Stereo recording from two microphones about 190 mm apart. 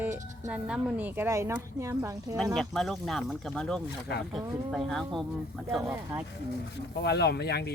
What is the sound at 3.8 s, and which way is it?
Speech, 60° left (ahead or behind).